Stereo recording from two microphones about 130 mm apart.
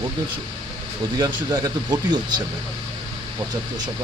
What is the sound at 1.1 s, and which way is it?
Speech, 30° right (ahead or behind).